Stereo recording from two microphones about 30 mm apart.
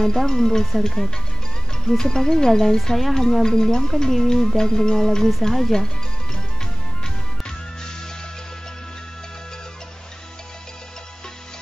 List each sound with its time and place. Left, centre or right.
0.0 s speech: centre
1.9 s music: centre
5.4 s speech: centre